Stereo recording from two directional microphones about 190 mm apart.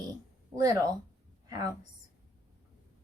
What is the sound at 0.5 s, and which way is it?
A woman's voice, 20° right (ahead or behind).